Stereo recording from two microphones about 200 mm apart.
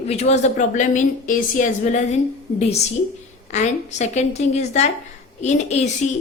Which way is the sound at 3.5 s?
35° left (ahead or behind).